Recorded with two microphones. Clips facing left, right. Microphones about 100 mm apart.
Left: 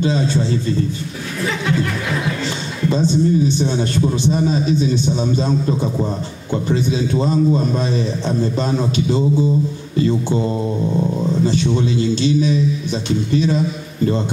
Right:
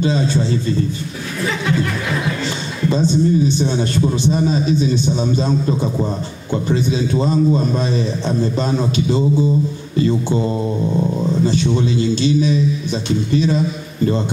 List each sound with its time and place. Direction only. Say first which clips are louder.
0.0 s a man's voice: even; 10° right (ahead or behind); by 6.8 s 25° right (ahead or behind)
6.9 s a man's voice: even; 10° right (ahead or behind)
10.0 s speech: even; 20° right (ahead or behind)
11.4 s a man's voice: even; 10° right (ahead or behind)